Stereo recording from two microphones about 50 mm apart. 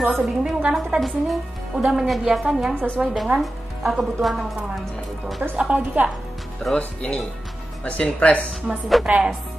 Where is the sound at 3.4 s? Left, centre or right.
Centre.